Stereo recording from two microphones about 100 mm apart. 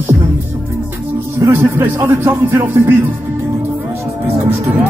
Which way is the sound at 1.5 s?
20° right (ahead or behind).